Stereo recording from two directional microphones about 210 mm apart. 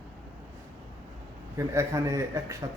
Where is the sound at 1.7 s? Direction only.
15° right (ahead or behind).